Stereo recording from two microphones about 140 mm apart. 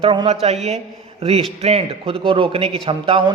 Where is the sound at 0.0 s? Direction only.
40° right (ahead or behind).